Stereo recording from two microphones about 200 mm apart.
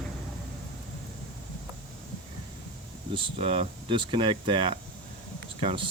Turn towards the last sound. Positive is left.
turn(degrees=-25)  # may be behind; listen again after turning